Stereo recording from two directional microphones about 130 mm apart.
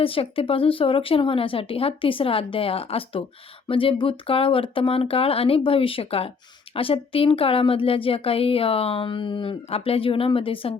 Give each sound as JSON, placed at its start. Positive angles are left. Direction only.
{"t": 0.0, "sound": "speech", "side_deg": 45}